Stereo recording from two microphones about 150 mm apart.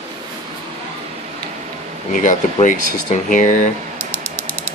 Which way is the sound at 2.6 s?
60° left (ahead or behind).